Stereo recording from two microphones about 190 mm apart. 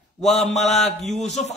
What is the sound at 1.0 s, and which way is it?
Speech, 35° left (ahead or behind).